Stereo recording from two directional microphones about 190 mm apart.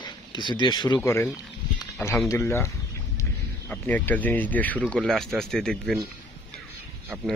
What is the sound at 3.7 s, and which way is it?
Speech, 10° left (ahead or behind).